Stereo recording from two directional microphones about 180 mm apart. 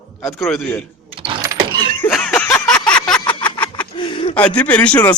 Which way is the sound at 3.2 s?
25° left (ahead or behind).